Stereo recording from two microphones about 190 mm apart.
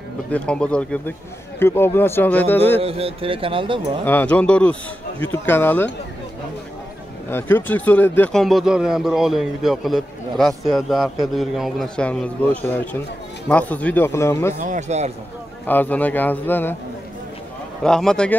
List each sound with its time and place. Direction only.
0.3 s a man's voice: 5° left (ahead or behind)
2.8 s speech: 30° right (ahead or behind)
4.0 s a man's voice: 10° left (ahead or behind)
7.2 s a man's voice: 10° left (ahead or behind)
14.6 s speech: 40° right (ahead or behind)
15.6 s a man's voice: 10° left (ahead or behind)
17.8 s speech: 5° left (ahead or behind)